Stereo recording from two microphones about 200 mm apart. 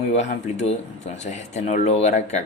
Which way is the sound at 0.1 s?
35° left (ahead or behind).